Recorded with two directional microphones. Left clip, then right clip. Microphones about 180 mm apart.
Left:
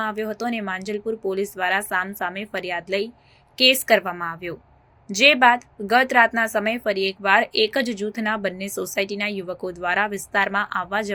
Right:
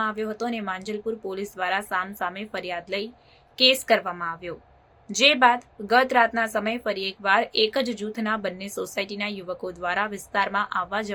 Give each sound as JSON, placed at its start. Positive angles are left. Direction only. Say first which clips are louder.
{"t": 0.0, "sound": "a woman's voice", "louder": "left 2 dB", "side_deg": 15}